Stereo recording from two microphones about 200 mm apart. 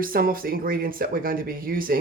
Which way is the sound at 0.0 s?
45° right (ahead or behind).